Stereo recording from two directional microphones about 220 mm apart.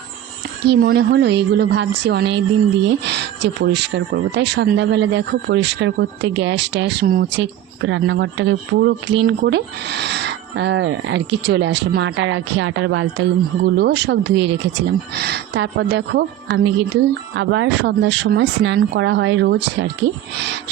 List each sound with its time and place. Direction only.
0.6 s speech: 45° right (ahead or behind)
13.7 s speech: 50° right (ahead or behind)